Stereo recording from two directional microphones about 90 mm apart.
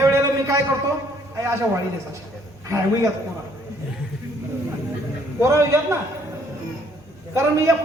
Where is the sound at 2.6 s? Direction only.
35° right (ahead or behind).